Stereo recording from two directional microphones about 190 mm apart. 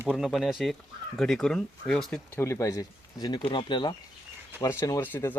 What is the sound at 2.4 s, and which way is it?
Speech, 15° left (ahead or behind).